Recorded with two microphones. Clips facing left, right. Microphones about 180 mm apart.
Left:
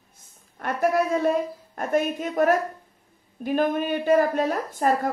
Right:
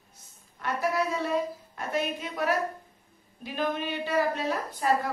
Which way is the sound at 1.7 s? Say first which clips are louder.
Left 7 dB; 50° left (ahead or behind).